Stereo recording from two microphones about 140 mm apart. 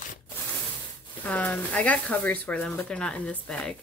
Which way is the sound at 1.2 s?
10° left (ahead or behind).